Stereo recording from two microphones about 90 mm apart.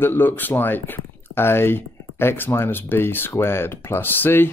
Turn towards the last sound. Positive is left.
turn(degrees=25)  # may be behind; listen again after turning